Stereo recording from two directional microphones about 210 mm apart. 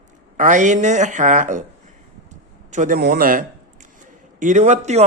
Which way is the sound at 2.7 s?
40° right (ahead or behind).